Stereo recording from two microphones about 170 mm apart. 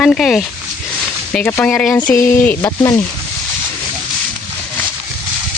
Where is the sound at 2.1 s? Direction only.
15° left (ahead or behind).